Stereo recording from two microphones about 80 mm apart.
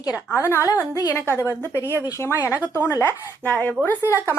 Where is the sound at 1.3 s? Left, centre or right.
Left.